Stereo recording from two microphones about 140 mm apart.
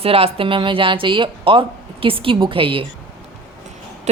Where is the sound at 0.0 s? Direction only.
45° right (ahead or behind).